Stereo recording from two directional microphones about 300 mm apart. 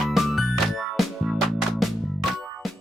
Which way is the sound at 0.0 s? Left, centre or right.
Centre.